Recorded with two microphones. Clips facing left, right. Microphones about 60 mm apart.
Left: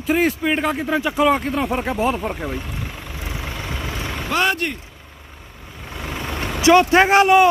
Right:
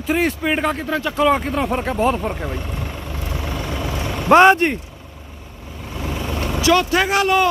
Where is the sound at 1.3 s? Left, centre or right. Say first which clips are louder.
Right 1 dB; centre.